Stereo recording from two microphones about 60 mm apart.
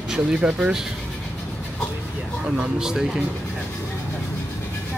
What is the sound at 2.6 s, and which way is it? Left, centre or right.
Speech, centre.